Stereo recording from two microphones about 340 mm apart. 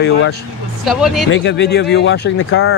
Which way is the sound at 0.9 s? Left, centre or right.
Centre.